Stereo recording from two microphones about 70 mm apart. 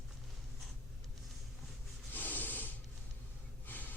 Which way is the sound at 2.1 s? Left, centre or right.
Left.